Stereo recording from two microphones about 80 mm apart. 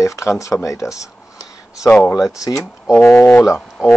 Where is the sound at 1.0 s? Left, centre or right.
Left.